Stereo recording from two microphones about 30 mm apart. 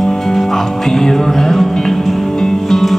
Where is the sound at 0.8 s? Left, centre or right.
Centre.